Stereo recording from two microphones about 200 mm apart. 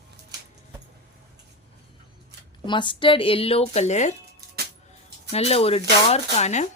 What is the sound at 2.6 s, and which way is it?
Speech, 25° left (ahead or behind).